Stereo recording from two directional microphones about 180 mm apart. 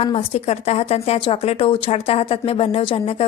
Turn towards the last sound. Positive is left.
turn(degrees=30)  # may be behind; listen again after turning